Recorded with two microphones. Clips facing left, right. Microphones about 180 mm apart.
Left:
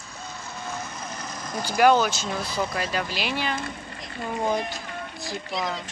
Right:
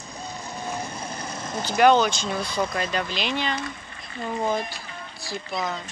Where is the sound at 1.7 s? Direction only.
5° left (ahead or behind).